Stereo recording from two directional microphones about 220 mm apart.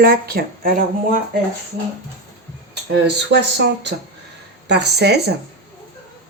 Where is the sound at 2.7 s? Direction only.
50° right (ahead or behind).